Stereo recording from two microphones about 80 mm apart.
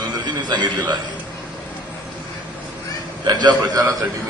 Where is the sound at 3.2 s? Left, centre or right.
Right.